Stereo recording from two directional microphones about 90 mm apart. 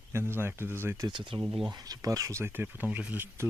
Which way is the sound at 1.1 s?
65° right (ahead or behind).